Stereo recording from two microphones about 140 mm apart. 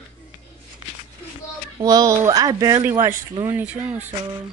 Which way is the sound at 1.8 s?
25° right (ahead or behind).